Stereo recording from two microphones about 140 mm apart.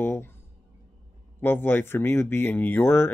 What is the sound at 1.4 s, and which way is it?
Speech, 15° left (ahead or behind).